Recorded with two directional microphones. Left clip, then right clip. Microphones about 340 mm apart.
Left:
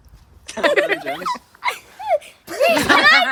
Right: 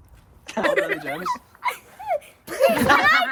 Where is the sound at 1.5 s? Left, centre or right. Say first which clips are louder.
Left 3 dB; left.